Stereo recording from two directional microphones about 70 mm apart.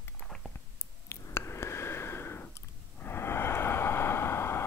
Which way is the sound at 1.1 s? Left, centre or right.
Left.